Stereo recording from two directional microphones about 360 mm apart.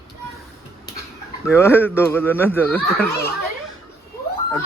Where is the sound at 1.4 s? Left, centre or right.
Centre.